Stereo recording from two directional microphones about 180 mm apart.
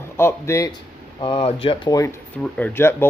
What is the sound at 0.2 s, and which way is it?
Speech, 15° left (ahead or behind).